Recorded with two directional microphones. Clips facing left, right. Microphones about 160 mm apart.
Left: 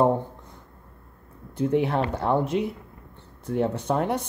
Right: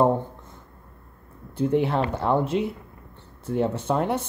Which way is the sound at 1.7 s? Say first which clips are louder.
Right 1 dB; centre (ahead or behind).